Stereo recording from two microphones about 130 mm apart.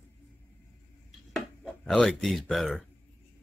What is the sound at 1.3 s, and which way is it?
Music, 5° left (ahead or behind).